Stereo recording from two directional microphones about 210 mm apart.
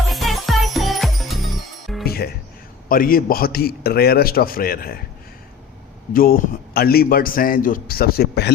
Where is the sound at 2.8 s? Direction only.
45° left (ahead or behind).